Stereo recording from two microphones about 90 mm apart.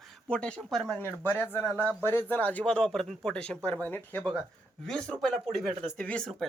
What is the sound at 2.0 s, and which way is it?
Speech, 20° left (ahead or behind).